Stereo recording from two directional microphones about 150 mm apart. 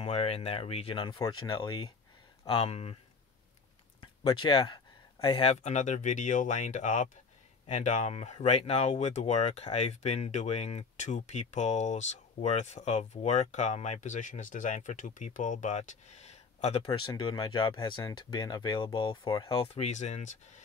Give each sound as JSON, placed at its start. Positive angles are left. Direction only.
{"t": 0.0, "sound": "speech", "side_deg": 40}
{"t": 2.4, "sound": "speech", "side_deg": 40}
{"t": 4.0, "sound": "a sound", "side_deg": 30}
{"t": 5.4, "sound": "speech", "side_deg": 45}